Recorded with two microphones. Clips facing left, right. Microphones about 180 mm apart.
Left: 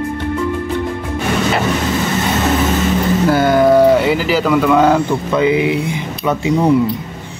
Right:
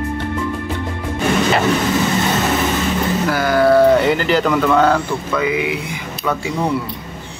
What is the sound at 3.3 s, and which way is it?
Speech, 25° left (ahead or behind).